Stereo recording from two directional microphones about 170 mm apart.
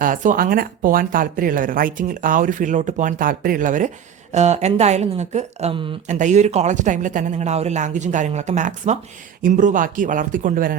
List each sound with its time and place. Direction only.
0.0 s speech: 50° right (ahead or behind); by 5.9 s 35° right (ahead or behind)
6.1 s speech: 45° right (ahead or behind)